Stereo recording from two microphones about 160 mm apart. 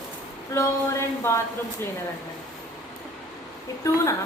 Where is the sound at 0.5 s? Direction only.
15° left (ahead or behind).